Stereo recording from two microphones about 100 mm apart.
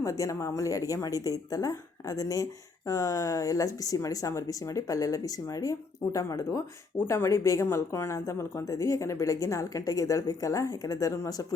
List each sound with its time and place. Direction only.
0.0 s speech: 35° left (ahead or behind)